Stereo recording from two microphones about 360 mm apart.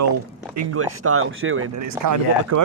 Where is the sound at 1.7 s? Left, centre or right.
Right.